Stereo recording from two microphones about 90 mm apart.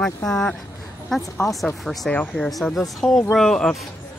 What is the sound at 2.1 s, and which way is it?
Speech, 15° left (ahead or behind).